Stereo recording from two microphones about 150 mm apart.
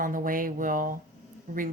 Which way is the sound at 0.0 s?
65° right (ahead or behind).